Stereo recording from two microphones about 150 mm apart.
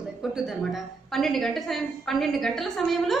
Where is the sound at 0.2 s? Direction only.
Centre (ahead or behind).